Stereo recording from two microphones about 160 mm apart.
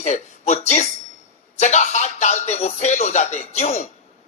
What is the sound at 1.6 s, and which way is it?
Music, 45° left (ahead or behind).